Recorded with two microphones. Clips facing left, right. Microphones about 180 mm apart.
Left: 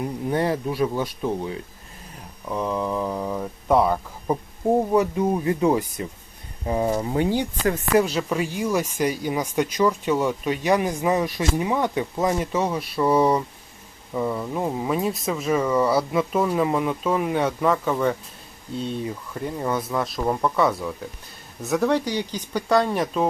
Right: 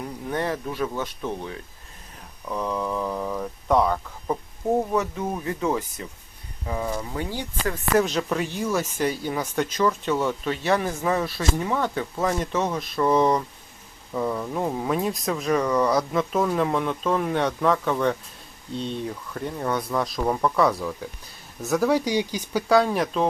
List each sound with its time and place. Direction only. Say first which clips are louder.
0.3 s speech: left 4 dB; 15° left (ahead or behind)
6.7 s speech: left 6 dB; 30° left (ahead or behind)
7.2 s speech: left 7 dB; 20° left (ahead or behind)
8.0 s speech: left 1 dB; 5° left (ahead or behind)